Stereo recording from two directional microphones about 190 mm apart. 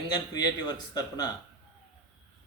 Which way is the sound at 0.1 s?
20° left (ahead or behind).